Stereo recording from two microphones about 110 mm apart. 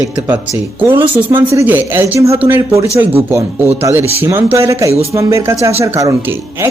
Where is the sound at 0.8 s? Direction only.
20° right (ahead or behind).